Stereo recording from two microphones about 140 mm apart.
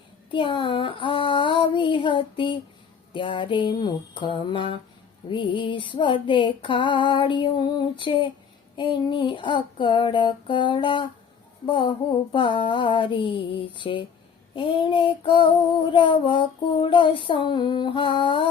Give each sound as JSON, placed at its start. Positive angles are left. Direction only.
{"t": 0.3, "sound": "female singing", "side_deg": 35}